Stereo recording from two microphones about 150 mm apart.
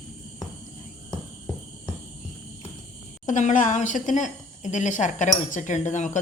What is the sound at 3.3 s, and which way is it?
A woman's voice, 55° left (ahead or behind).